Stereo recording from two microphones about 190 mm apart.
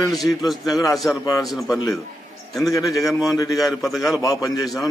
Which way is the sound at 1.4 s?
Centre (ahead or behind).